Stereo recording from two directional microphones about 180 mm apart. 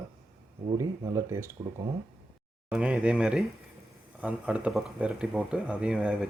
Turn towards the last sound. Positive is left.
turn(degrees=-5)  # may be behind; listen again after turning